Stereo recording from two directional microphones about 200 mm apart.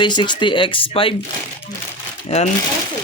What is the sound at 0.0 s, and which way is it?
Speech, 25° left (ahead or behind).